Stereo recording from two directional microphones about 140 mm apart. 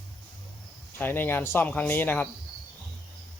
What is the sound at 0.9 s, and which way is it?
Speech, 15° left (ahead or behind).